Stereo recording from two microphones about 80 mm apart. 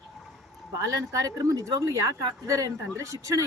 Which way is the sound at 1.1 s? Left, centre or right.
Right.